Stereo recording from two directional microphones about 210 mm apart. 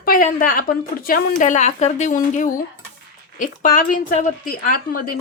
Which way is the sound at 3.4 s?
40° left (ahead or behind).